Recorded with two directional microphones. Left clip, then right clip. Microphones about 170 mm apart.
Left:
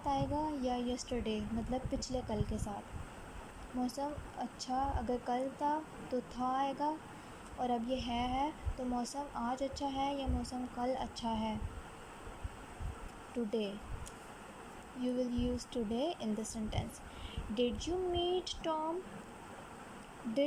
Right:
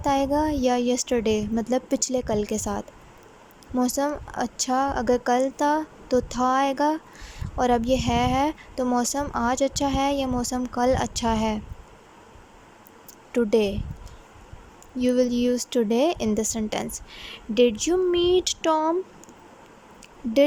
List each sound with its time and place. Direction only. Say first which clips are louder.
0.0 s speech: right 13 dB; 55° right (ahead or behind)
3.8 s speech: right 15 dB; 60° right (ahead or behind)
13.3 s speech: right 17 dB; 60° right (ahead or behind)
15.0 s speech: right 15 dB; 60° right (ahead or behind)